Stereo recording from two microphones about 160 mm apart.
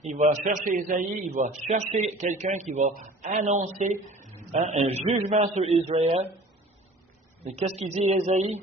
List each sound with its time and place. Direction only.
0.0 s a man's voice: 45° right (ahead or behind)
7.4 s a man's voice: 45° right (ahead or behind)